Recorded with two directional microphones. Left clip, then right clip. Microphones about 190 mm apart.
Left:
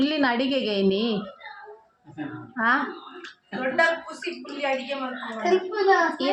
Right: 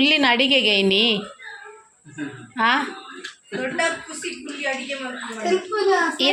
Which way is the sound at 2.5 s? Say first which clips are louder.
Right 3 dB; centre (ahead or behind).